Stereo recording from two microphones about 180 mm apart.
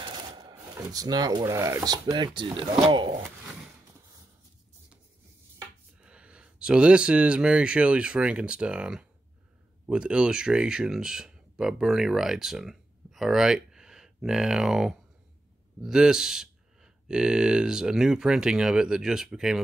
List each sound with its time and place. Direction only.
0.0 s speech: 25° right (ahead or behind)
5.9 s speech: 5° right (ahead or behind)